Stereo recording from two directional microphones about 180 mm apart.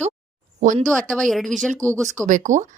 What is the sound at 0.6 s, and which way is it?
Speech, 45° right (ahead or behind).